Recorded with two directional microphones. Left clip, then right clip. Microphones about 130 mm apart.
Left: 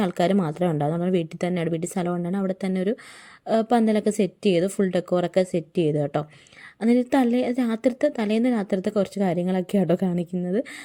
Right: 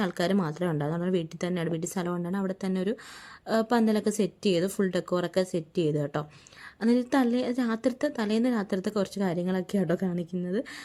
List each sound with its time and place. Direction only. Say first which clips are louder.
0.0 s a woman's voice: left 5 dB; 25° left (ahead or behind)